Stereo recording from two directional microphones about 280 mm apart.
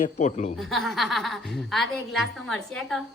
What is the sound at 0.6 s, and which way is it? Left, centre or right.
A woman's voice, centre.